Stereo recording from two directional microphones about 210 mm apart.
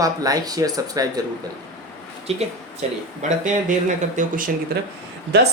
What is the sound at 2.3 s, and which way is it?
Speech, 30° right (ahead or behind).